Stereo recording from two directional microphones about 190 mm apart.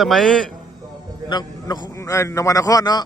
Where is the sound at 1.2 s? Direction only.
20° left (ahead or behind).